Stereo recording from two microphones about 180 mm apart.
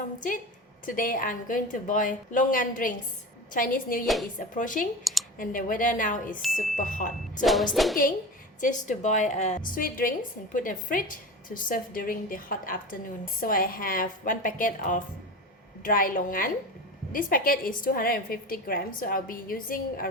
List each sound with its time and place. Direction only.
0.9 s a woman's voice: 50° left (ahead or behind)
4.0 s music: centre (ahead or behind)
4.4 s a woman's voice: 45° left (ahead or behind)
7.4 s music: centre (ahead or behind)
8.6 s a woman's voice: 40° left (ahead or behind)